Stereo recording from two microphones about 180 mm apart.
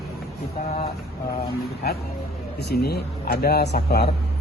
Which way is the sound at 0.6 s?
40° left (ahead or behind).